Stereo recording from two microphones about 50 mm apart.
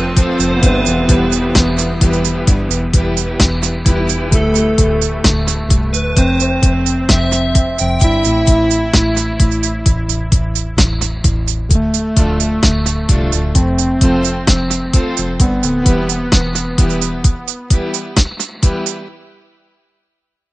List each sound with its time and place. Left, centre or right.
0.0 s music: centre
6.3 s music: centre
7.0 s music: centre